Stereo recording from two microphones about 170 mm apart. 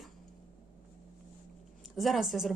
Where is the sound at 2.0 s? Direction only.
Centre (ahead or behind).